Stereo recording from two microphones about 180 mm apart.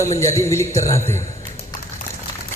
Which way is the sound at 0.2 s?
15° left (ahead or behind).